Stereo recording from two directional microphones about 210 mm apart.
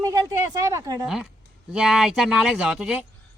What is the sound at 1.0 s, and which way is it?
A man's voice, 5° right (ahead or behind).